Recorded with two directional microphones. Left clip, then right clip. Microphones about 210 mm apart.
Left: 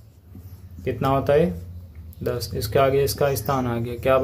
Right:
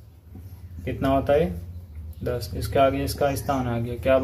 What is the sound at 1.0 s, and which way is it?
Speech, 50° left (ahead or behind).